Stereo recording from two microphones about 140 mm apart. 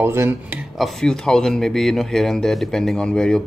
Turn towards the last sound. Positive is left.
turn(degrees=5)  # may be behind; listen again after turning